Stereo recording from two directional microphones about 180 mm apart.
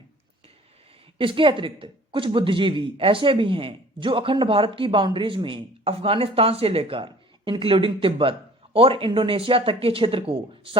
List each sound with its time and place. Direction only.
1.2 s speech: 30° right (ahead or behind)